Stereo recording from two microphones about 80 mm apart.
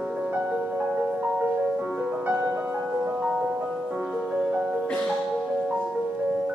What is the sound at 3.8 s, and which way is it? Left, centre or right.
Music, centre.